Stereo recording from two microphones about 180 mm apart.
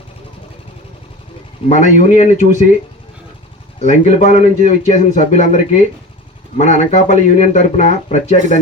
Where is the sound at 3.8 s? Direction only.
40° left (ahead or behind).